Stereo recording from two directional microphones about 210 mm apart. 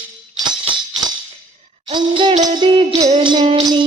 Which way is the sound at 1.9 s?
25° right (ahead or behind).